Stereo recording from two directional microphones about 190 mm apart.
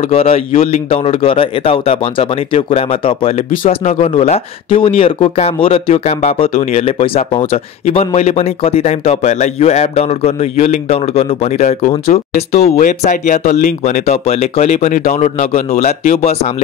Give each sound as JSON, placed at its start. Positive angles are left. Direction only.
{"t": 0.1, "sound": "speech", "side_deg": 30}